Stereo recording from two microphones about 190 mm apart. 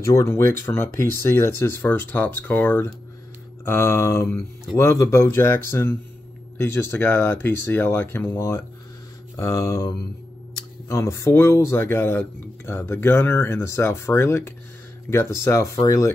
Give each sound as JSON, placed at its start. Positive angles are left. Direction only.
{"t": 0.0, "sound": "speech", "side_deg": 15}